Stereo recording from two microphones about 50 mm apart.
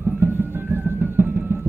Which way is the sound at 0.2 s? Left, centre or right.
Right.